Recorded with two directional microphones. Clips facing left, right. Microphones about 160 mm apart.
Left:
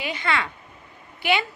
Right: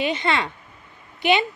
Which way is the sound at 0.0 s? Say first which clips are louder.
Right 4 dB; 20° right (ahead or behind).